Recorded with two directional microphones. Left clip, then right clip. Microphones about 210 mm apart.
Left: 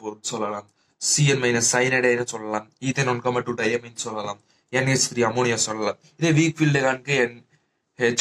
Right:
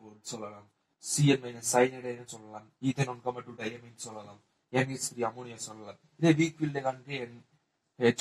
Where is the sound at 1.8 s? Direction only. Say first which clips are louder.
Left 5 dB; 30° left (ahead or behind).